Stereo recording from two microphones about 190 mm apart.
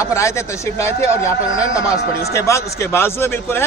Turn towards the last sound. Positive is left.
turn(degrees=10)  # may be behind; listen again after turning